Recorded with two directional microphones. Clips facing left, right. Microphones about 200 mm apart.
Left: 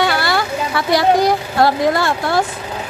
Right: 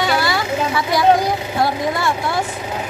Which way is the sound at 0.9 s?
80° left.